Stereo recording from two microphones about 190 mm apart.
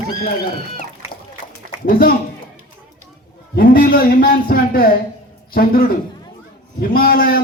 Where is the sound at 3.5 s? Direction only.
50° left (ahead or behind).